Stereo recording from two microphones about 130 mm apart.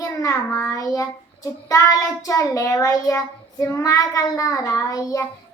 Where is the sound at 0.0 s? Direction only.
25° left (ahead or behind).